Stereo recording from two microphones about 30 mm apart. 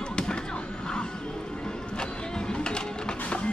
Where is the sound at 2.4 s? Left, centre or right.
Left.